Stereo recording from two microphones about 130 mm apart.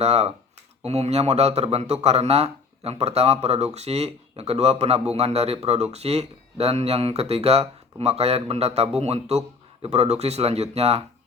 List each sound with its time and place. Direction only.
0.0 s speech: 55° right (ahead or behind)